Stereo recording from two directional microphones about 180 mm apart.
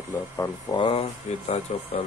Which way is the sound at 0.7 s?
30° left (ahead or behind).